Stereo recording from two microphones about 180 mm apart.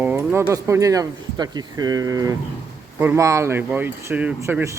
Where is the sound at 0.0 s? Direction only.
10° right (ahead or behind).